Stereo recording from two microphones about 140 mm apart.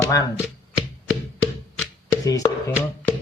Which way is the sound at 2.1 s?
25° left (ahead or behind).